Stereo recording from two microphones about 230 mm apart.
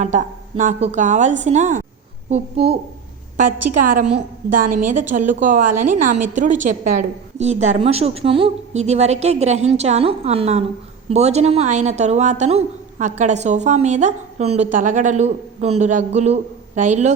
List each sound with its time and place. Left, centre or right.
0.0 s a woman's voice: right
3.4 s a woman's voice: right
3.8 s a woman's voice: right
4.0 s a woman's voice: right
4.7 s a woman's voice: right